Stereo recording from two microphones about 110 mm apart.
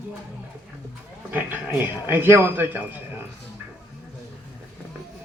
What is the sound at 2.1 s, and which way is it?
A man's voice, 20° right (ahead or behind).